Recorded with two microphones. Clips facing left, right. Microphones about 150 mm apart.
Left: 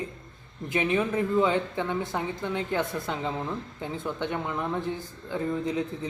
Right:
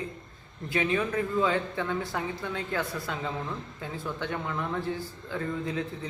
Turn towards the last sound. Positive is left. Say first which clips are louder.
# left 3 dB
turn(degrees=15)  # may be behind; listen again after turning